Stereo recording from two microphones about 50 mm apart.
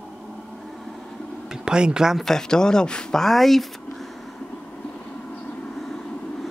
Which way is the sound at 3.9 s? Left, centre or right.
Centre.